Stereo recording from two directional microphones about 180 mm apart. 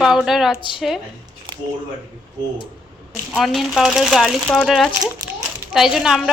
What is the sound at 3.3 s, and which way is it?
A woman's voice, centre (ahead or behind).